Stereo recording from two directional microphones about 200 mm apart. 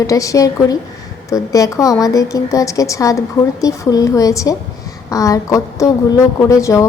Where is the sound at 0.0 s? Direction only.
15° left (ahead or behind).